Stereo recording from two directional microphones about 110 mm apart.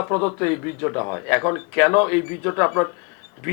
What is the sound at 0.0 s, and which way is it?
Speech, 20° left (ahead or behind).